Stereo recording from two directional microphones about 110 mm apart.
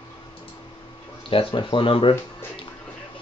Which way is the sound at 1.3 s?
50° left (ahead or behind).